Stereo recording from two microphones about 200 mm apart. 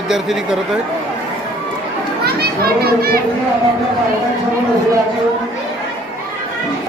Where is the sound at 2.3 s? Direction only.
50° right (ahead or behind).